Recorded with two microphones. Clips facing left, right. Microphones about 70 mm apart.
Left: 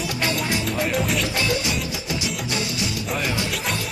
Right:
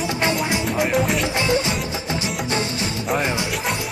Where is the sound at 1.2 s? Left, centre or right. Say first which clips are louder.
Right 3 dB; right.